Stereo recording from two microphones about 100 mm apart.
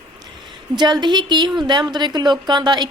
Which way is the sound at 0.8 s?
45° right (ahead or behind).